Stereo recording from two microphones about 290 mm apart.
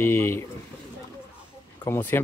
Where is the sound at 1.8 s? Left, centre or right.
Centre.